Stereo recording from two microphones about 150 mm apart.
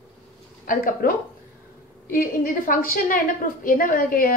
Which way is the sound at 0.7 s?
70° left (ahead or behind).